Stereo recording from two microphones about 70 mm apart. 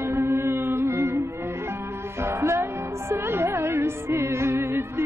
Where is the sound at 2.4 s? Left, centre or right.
Right.